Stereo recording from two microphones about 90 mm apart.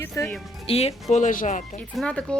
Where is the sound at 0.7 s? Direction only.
90° left.